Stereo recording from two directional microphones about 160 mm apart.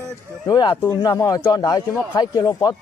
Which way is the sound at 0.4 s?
25° left (ahead or behind).